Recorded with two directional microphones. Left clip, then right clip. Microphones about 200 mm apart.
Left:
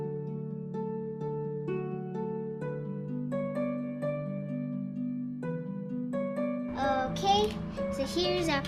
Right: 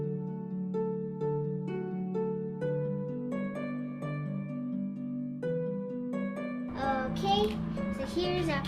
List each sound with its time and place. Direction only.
6.8 s music: 55° left (ahead or behind)